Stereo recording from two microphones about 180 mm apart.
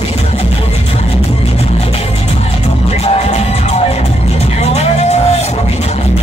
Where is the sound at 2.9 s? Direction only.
35° left (ahead or behind).